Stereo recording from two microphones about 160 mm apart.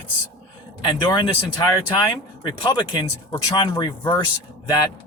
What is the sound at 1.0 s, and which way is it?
Speech, 30° left (ahead or behind).